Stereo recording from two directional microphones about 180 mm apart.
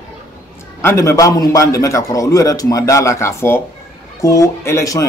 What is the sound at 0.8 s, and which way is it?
A man's voice, 15° left (ahead or behind).